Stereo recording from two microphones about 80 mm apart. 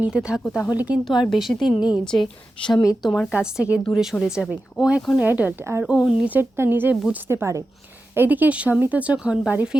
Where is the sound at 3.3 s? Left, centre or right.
Centre.